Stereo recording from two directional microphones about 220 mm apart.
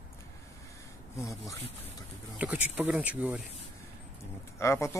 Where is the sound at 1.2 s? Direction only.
15° left (ahead or behind).